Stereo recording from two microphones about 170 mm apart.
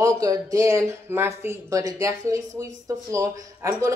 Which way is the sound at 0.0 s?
20° right (ahead or behind).